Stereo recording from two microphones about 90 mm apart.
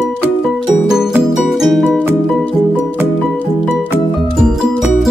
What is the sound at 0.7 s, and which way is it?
Music, 5° right (ahead or behind).